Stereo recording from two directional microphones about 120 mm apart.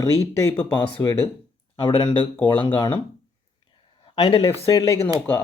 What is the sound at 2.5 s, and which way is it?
Speech, 50° left (ahead or behind).